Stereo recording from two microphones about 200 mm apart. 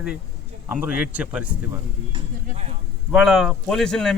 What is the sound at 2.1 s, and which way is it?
Speech, 30° right (ahead or behind).